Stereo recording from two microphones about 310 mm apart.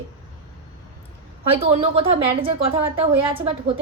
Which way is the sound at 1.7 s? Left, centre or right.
Centre.